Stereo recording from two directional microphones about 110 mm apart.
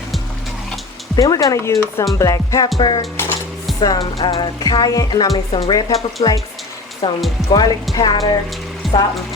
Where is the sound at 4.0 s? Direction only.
60° left (ahead or behind).